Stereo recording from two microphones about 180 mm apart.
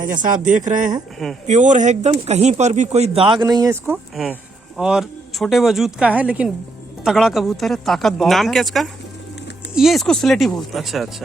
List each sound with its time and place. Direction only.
0.1 s speech: 45° right (ahead or behind); by 3.9 s 20° right (ahead or behind)
4.1 s speech: centre (ahead or behind)